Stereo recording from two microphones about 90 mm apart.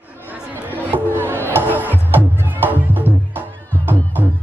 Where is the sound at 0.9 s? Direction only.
25° right (ahead or behind).